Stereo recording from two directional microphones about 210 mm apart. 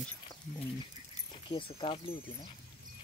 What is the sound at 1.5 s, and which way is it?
Speech, 25° left (ahead or behind).